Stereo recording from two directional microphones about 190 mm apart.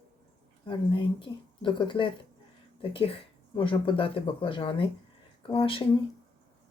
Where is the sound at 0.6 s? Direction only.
25° left (ahead or behind).